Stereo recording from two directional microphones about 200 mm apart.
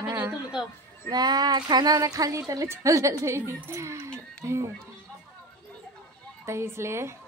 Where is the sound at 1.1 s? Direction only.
20° right (ahead or behind).